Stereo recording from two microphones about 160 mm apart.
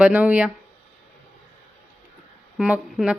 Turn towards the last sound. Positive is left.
turn(degrees=-5)  # may be behind; listen again after turning